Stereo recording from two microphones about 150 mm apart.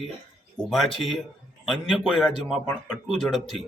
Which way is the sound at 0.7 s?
Centre (ahead or behind).